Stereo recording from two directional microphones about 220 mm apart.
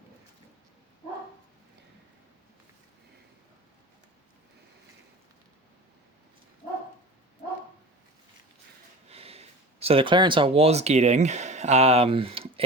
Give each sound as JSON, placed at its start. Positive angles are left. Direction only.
{"t": 9.0, "sound": "speech", "side_deg": -25}